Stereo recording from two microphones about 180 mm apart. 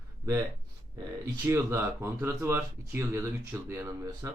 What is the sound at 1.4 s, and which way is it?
Speech, 15° right (ahead or behind).